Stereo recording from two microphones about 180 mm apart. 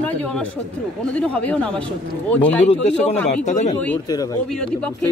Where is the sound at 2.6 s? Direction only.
40° left (ahead or behind).